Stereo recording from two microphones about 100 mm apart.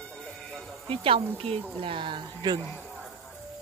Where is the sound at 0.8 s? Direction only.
65° right (ahead or behind); by 2.6 s 50° right (ahead or behind).